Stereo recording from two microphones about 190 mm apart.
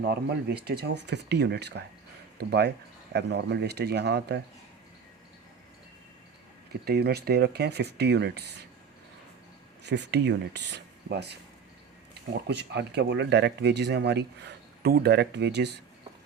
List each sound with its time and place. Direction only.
0.0 s speech: 55° right (ahead or behind)
6.8 s speech: 55° right (ahead or behind)
9.8 s speech: 65° right (ahead or behind)
12.5 s speech: 60° right (ahead or behind)